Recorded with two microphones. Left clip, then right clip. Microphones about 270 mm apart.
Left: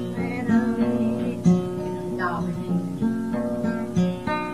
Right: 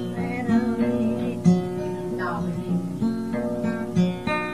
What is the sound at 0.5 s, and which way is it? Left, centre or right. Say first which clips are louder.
Music: even; right.